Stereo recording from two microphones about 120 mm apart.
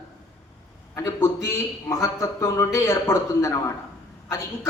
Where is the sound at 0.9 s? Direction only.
25° left (ahead or behind).